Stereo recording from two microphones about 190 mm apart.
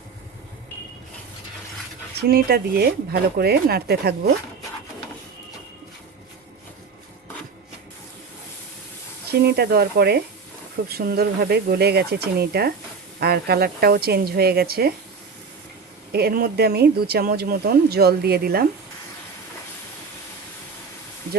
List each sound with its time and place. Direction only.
2.2 s speech: 55° right (ahead or behind)
9.3 s speech: 55° right (ahead or behind)
16.1 s speech: 55° right (ahead or behind)